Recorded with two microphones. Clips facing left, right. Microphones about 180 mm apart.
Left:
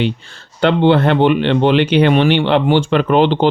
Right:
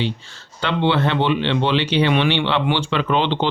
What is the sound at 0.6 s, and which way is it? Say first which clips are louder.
Speech: left 7 dB; 55° left (ahead or behind).